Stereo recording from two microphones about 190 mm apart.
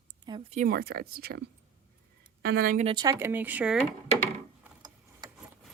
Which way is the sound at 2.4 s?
55° right (ahead or behind).